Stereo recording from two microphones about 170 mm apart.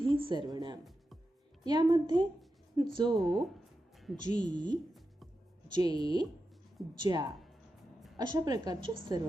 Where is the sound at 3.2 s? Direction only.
Centre (ahead or behind).